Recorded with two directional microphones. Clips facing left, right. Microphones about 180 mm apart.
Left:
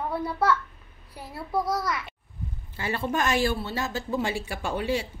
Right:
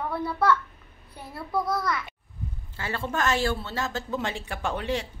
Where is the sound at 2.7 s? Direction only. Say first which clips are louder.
Left 3 dB; 15° left (ahead or behind).